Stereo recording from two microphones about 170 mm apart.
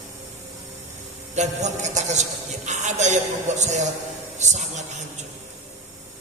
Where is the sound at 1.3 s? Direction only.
45° right (ahead or behind).